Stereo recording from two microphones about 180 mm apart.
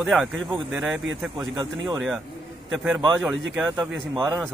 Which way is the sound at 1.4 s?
20° right (ahead or behind).